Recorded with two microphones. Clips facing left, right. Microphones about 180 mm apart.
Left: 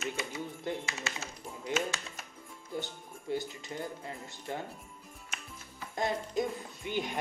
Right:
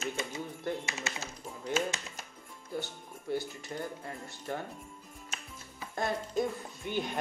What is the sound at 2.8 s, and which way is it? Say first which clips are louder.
Speech: even; 15° left (ahead or behind).